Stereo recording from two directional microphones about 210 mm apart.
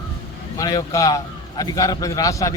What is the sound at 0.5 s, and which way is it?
A man's voice, 15° left (ahead or behind).